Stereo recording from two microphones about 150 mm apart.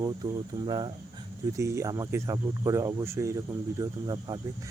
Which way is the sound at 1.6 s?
20° right (ahead or behind).